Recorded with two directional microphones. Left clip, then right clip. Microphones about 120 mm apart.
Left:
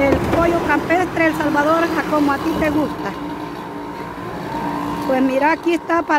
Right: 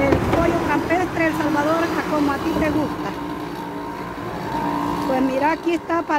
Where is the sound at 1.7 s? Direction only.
85° left.